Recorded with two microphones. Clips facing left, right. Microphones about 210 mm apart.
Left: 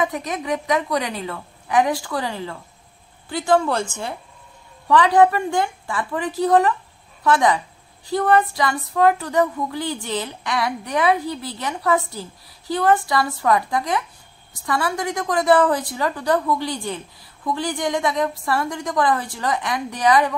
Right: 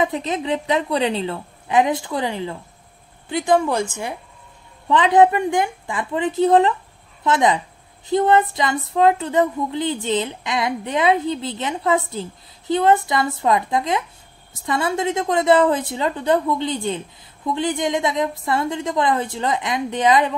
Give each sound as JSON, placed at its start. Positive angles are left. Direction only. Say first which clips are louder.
{"t": 0.0, "sound": "a woman's voice", "louder": "right 2 dB", "side_deg": -25}